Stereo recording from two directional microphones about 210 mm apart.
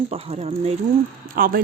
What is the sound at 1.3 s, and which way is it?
Speech, 45° right (ahead or behind).